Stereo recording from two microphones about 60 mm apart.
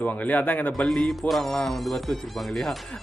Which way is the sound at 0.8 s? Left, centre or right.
Centre.